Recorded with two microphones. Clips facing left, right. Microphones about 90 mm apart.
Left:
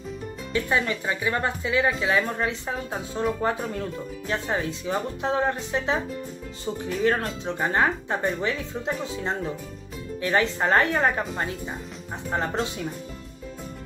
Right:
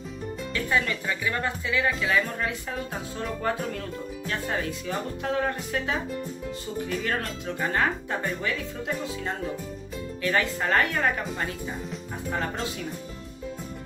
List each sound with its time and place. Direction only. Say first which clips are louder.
0.5 s speech: left 2 dB; 25° left (ahead or behind)
7.0 s speech: left 6 dB; 30° left (ahead or behind)
10.2 s speech: left 3 dB; 30° left (ahead or behind)